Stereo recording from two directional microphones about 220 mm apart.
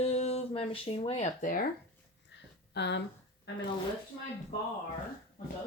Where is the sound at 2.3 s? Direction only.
50° left (ahead or behind).